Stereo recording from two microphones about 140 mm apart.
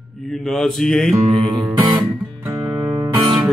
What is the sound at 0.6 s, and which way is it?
Music, 5° left (ahead or behind).